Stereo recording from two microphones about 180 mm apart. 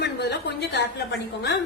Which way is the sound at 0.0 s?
70° left (ahead or behind).